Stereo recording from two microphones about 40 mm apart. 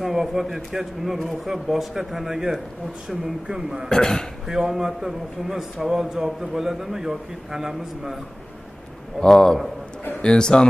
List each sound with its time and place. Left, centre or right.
0.0 s a man's voice: centre
3.9 s a man's voice: centre
4.5 s a man's voice: centre
9.2 s a man's voice: centre